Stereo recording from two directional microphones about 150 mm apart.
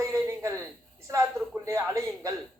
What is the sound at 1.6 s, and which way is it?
Speech, 20° right (ahead or behind).